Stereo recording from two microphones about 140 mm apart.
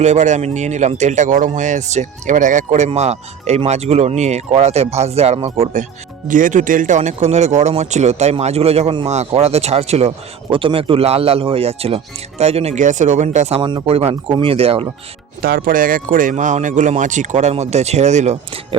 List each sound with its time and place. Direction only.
0.0 s speech: 55° right (ahead or behind)
6.2 s speech: 70° right (ahead or behind); by 10.1 s 50° right (ahead or behind)
10.5 s speech: 40° right (ahead or behind); by 13.6 s 55° right (ahead or behind)
13.6 s speech: 35° right (ahead or behind)
15.4 s speech: 90° right; by 18.6 s 55° right (ahead or behind)